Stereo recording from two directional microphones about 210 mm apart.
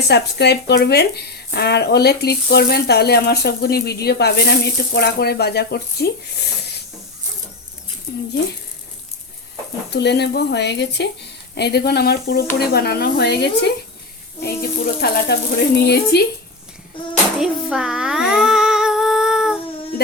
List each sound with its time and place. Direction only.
0.1 s speech: 50° left (ahead or behind)
8.1 s speech: 50° left (ahead or behind)
9.9 s speech: 55° left (ahead or behind)
17.0 s child singing: 25° left (ahead or behind)
17.4 s child singing: 5° right (ahead or behind)